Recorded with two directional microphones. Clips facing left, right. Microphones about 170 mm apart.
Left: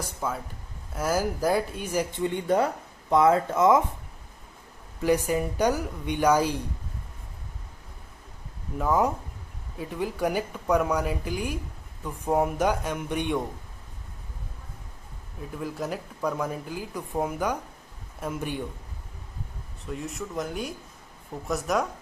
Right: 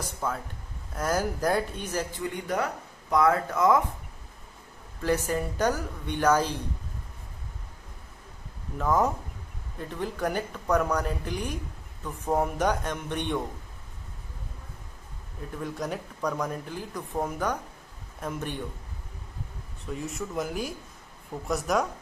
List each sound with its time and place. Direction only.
0.2 s speech: 5° left (ahead or behind)
2.1 s speech: 25° left (ahead or behind)
5.0 s speech: 15° left (ahead or behind)
8.8 s speech: 10° left (ahead or behind)
15.4 s speech: 5° left (ahead or behind)
19.9 s speech: centre (ahead or behind)